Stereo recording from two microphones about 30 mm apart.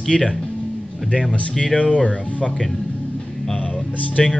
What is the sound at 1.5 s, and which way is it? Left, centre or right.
Speech, left.